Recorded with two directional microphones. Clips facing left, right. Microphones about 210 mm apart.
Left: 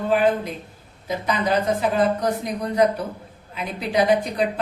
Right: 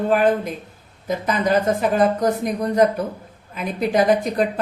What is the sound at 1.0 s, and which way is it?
Speech, 50° right (ahead or behind).